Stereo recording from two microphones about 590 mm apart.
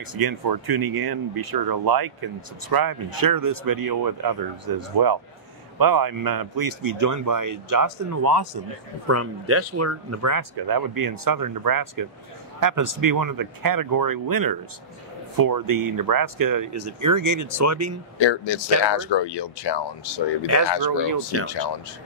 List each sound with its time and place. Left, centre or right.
0.0 s speech: right
9.0 s speech: right
18.2 s speech: left
20.8 s speech: right